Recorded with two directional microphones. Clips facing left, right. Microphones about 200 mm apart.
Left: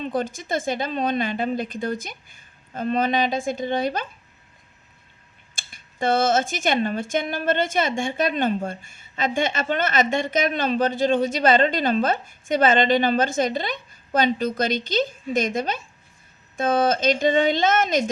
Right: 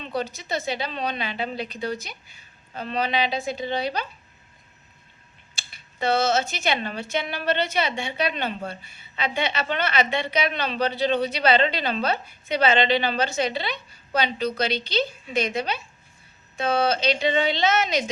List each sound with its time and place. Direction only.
0.0 s speech: 50° left (ahead or behind)
5.5 s speech: 50° left (ahead or behind)